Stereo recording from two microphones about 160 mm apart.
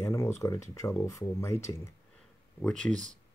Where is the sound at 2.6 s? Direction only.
5° left (ahead or behind).